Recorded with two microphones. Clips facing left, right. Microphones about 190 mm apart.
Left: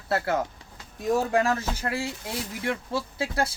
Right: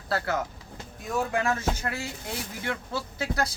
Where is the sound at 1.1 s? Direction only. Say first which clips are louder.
Left 4 dB; 35° left (ahead or behind).